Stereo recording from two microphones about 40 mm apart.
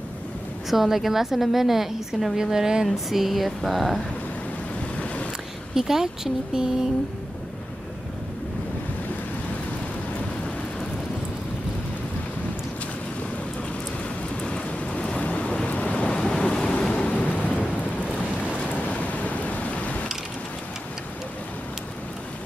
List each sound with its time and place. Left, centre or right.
0.7 s a woman's voice: centre
4.9 s vehicle: left
5.8 s a woman's voice: centre
14.4 s vehicle: left
15.1 s a sound: left
16.2 s waves: left
17.1 s a sound: left